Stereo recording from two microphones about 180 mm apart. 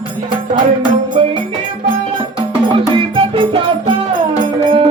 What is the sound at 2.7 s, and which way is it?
Music, 30° right (ahead or behind).